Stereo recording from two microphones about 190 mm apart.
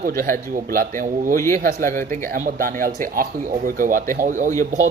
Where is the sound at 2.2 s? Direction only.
45° right (ahead or behind).